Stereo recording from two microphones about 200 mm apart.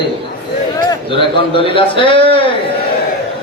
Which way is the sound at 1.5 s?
25° left (ahead or behind).